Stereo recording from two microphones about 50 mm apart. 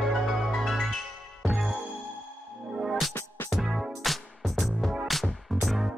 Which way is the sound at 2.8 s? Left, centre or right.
Centre.